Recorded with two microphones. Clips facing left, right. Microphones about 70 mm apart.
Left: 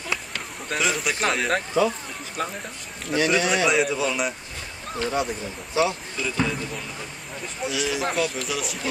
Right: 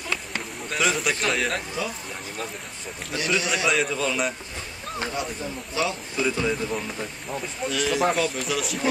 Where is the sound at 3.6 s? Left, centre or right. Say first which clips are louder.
Left 2 dB; centre.